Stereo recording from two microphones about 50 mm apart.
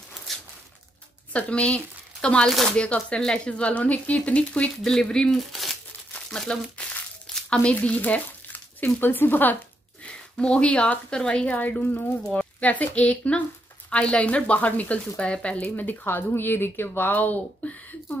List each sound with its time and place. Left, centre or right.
0.3 s a sound: centre
1.3 s speech: left
5.3 s speech: centre
6.1 s crumpling: centre
7.4 s speech: left
9.0 s speech: left
10.4 s speech: left
11.5 s speech: left
12.2 s speech: centre
12.5 s speech: left
15.7 s speech: left